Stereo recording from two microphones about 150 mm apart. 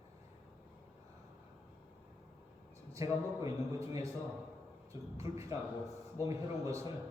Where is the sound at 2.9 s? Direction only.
20° right (ahead or behind).